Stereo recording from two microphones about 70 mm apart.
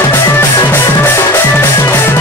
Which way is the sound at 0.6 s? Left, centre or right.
Left.